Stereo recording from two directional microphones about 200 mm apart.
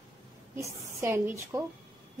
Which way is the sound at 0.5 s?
15° right (ahead or behind).